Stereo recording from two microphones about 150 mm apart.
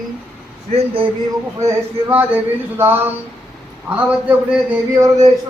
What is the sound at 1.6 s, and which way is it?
A man's voice, 15° right (ahead or behind).